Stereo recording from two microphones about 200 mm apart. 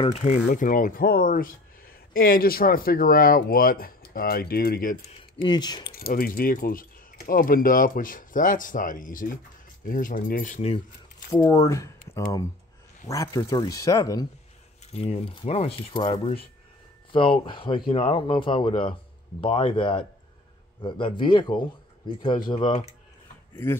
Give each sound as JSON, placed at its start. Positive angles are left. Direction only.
{"t": 0.1, "sound": "speech", "side_deg": 35}
{"t": 5.4, "sound": "speech", "side_deg": 20}
{"t": 5.9, "sound": "speech", "side_deg": 50}
{"t": 11.2, "sound": "speech", "side_deg": 20}
{"t": 13.1, "sound": "speech", "side_deg": 15}
{"t": 14.9, "sound": "speech", "side_deg": 30}
{"t": 23.5, "sound": "speech", "side_deg": 10}